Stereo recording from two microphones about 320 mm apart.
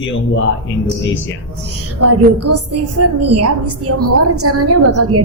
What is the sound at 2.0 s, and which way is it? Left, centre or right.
A woman's voice, right.